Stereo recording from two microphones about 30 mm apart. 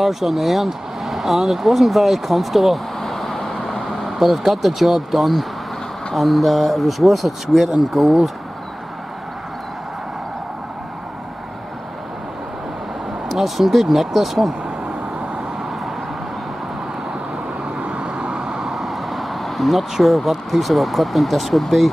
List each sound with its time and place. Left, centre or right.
0.0 s speech: centre
13.3 s speech: centre
17.9 s vehicle: right
18.6 s speech: centre